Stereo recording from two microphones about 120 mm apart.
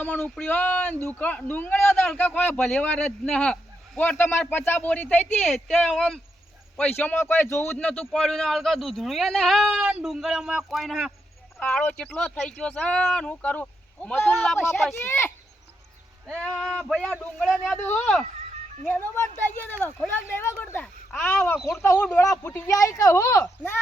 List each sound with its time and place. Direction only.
0.0 s speech: 10° left (ahead or behind)
5.5 s speech: centre (ahead or behind)
6.7 s speech: 15° left (ahead or behind)
7.8 s speech: 10° left (ahead or behind)
11.6 s speech: 10° left (ahead or behind)
16.4 s speech: 5° left (ahead or behind)
18.9 s speech: 20° left (ahead or behind)
21.7 s speech: 20° left (ahead or behind)